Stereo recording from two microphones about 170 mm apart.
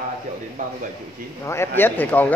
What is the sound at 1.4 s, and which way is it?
Speech, 15° left (ahead or behind).